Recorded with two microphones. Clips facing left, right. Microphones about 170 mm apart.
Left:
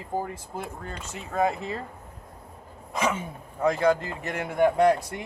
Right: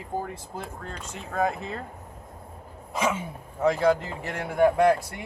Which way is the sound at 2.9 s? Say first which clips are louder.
Even; 10° right (ahead or behind).